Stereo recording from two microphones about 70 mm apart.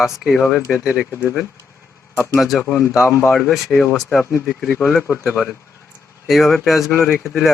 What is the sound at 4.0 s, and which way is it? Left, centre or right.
Speech, centre.